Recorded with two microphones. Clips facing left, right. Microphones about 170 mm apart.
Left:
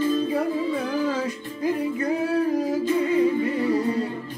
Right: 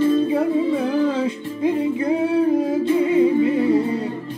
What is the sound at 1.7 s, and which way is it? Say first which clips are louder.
Singing: right 4 dB; 25° right (ahead or behind).